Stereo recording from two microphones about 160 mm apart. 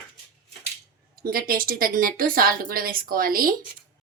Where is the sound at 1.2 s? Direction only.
65° right (ahead or behind).